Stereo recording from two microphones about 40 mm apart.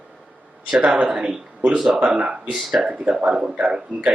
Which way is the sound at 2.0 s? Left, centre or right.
Right.